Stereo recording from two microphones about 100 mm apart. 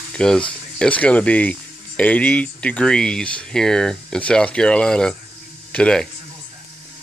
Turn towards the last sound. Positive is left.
turn(degrees=10)  # may be behind; listen again after turning